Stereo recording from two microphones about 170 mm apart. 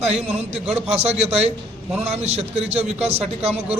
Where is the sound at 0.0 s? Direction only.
40° right (ahead or behind).